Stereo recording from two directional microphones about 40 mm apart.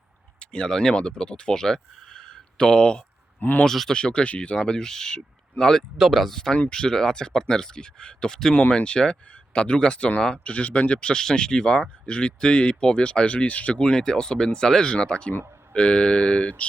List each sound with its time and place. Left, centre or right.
0.3 s a sound: left
0.7 s speech: centre
3.7 s speech: centre
3.9 s speech: left
6.0 s speech: centre
6.3 s speech: centre; by 13.7 s left
13.7 s speech: left